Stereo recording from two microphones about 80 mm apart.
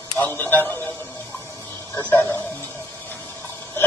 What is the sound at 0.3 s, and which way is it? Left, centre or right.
Speech, left.